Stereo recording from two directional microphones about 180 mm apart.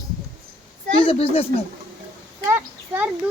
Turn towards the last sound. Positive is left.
turn(degrees=-10)  # may be behind; listen again after turning